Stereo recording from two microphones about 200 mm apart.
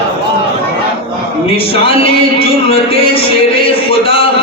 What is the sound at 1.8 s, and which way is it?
A man's voice, 30° left (ahead or behind).